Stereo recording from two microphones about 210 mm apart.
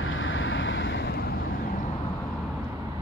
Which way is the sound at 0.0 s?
70° left (ahead or behind).